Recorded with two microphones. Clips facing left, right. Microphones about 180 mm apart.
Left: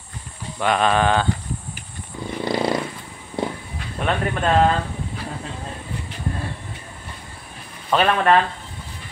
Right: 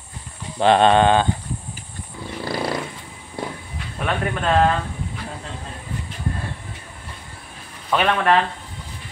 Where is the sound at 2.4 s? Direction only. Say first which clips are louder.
Left 3 dB; 20° left (ahead or behind).